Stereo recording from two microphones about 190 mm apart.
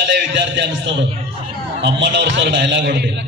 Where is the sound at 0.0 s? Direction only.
70° right (ahead or behind).